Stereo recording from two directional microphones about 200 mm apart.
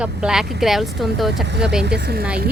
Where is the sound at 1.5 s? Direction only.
60° right (ahead or behind).